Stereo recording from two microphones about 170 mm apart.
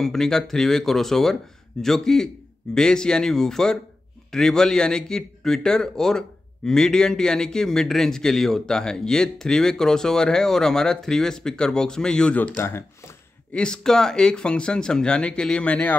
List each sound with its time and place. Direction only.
0.0 s speech: 5° left (ahead or behind)